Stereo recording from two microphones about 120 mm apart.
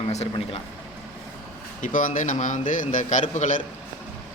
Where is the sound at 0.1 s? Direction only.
60° left (ahead or behind).